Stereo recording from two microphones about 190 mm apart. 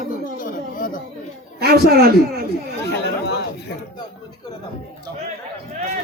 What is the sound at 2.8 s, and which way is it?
Chatter, 65° left (ahead or behind).